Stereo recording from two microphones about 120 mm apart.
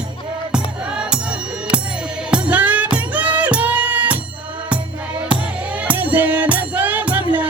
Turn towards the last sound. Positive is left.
turn(degrees=-15)  # may be behind; listen again after turning